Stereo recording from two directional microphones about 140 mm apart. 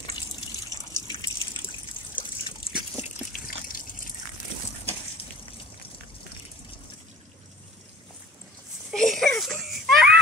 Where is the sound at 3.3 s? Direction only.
85° left.